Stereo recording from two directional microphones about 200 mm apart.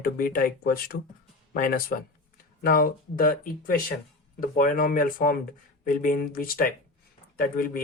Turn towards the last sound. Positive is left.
turn(degrees=45)  # may be behind; listen again after turning